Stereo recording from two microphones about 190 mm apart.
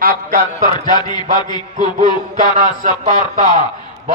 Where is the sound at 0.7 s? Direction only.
20° left (ahead or behind).